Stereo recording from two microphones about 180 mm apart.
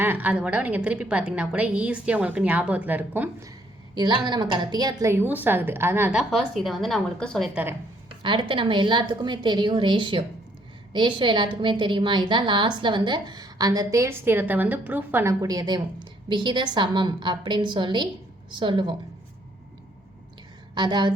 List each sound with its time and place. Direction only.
0.0 s a woman's voice: 10° right (ahead or behind)
3.9 s a woman's voice: 25° right (ahead or behind); by 7.6 s centre (ahead or behind)
8.2 s a woman's voice: 25° right (ahead or behind)
20.7 s a woman's voice: 25° right (ahead or behind)